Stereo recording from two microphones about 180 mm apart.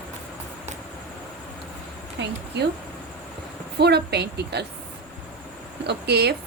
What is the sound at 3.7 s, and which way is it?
Speech, 65° right (ahead or behind).